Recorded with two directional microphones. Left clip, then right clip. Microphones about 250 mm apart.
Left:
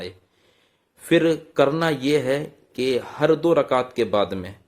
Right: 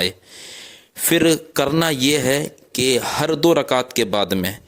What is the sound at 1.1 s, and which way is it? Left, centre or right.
Speech, right.